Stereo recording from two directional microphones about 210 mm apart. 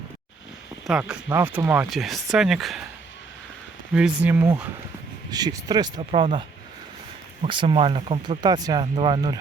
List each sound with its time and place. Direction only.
0.9 s speech: 5° right (ahead or behind)
3.9 s speech: 5° right (ahead or behind)
5.3 s speech: 20° right (ahead or behind)
7.4 s speech: 25° right (ahead or behind)